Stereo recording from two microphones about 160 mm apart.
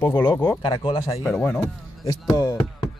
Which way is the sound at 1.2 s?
10° left (ahead or behind).